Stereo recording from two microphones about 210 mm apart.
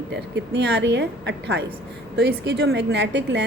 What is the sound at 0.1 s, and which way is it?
Speech, 55° right (ahead or behind).